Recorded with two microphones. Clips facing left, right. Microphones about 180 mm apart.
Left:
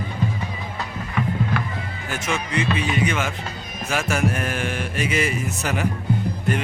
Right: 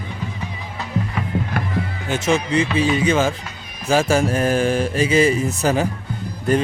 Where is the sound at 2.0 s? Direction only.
25° right (ahead or behind).